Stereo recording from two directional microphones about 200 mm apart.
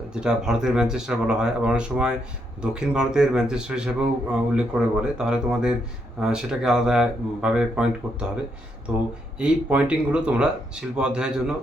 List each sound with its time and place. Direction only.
0.1 s a man's voice: 5° right (ahead or behind)
8.9 s a man's voice: 5° right (ahead or behind)